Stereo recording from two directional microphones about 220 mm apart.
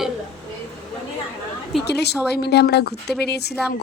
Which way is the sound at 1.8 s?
50° left (ahead or behind).